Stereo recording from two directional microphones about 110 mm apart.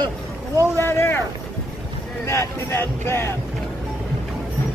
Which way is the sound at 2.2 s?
20° left (ahead or behind).